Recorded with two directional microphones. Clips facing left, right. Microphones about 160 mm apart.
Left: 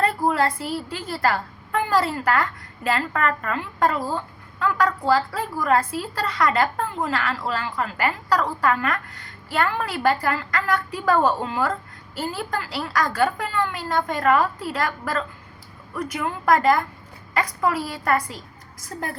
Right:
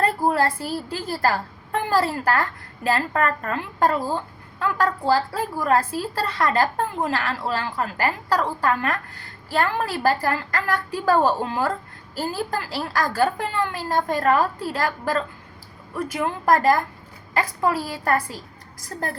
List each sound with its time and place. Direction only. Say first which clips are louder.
0.9 s a woman's voice: right 1 dB; 35° right (ahead or behind)